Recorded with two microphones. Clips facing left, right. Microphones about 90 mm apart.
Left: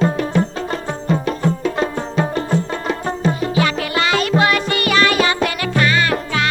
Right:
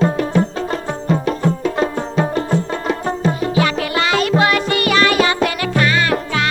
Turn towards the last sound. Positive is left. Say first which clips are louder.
# right 1 dB
turn(degrees=-10)  # may be behind; listen again after turning